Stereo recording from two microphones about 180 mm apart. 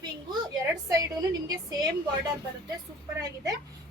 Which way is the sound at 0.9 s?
20° right (ahead or behind).